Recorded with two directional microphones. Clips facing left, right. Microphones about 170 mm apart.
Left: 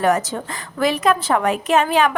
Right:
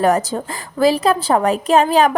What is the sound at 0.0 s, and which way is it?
Speech, 35° right (ahead or behind).